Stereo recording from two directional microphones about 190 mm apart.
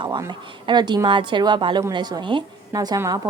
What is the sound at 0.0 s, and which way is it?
A woman's voice, 25° right (ahead or behind).